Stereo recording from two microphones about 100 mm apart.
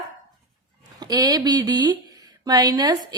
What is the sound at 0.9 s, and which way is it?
A woman's voice, 40° right (ahead or behind).